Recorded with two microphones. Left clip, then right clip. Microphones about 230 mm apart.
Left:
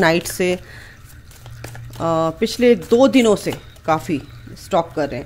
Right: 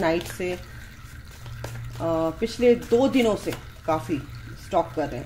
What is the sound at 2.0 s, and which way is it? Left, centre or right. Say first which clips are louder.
Speech: left 6 dB; left.